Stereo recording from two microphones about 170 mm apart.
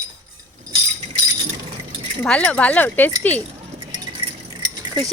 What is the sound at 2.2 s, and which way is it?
Speech, 10° left (ahead or behind).